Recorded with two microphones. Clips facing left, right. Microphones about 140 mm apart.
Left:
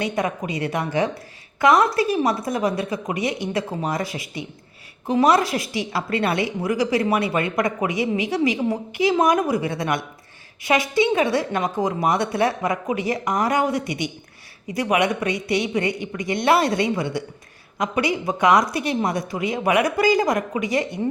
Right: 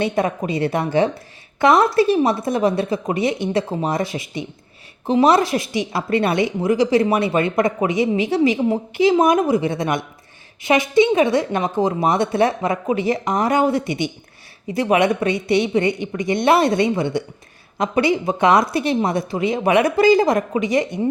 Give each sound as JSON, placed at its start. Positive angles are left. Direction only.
{"t": 0.0, "sound": "a woman's voice", "side_deg": -30}